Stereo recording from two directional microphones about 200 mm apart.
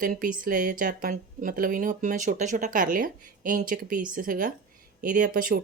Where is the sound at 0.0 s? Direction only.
45° right (ahead or behind).